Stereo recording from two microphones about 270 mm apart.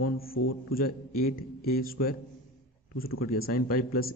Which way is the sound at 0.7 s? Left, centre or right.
Left.